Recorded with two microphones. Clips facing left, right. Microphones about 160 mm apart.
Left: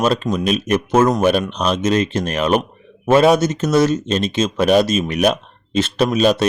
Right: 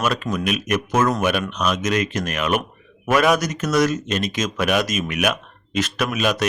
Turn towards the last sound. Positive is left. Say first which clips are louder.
# left 7 dB
turn(degrees=30)  # may be behind; listen again after turning